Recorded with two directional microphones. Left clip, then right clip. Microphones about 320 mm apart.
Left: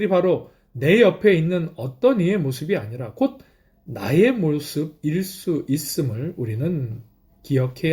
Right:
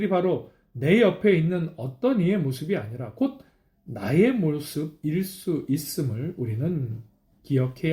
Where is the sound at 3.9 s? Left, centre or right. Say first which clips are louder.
Left 4 dB; left.